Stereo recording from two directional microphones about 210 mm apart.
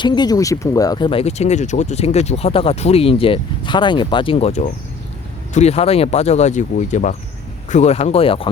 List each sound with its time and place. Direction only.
0.0 s speech: 20° left (ahead or behind)